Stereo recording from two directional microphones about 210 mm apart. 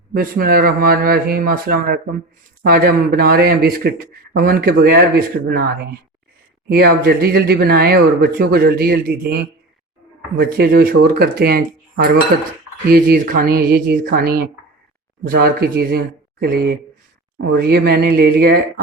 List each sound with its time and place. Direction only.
0.1 s speech: 45° right (ahead or behind)